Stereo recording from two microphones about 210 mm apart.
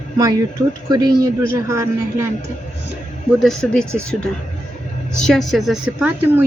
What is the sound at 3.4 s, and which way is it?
A woman's voice, 5° left (ahead or behind).